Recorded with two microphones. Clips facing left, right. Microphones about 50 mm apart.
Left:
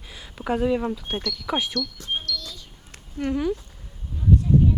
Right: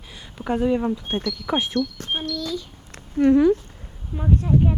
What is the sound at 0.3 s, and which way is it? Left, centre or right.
Speech, centre.